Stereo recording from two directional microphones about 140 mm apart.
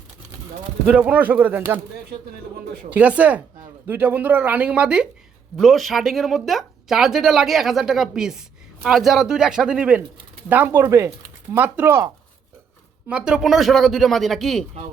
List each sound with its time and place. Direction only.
0.9 s speech: 10° right (ahead or behind)
2.9 s speech: 10° right (ahead or behind)
13.1 s speech: 5° right (ahead or behind)